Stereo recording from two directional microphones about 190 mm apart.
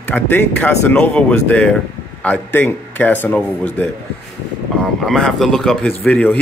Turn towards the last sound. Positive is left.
turn(degrees=10)  # may be behind; listen again after turning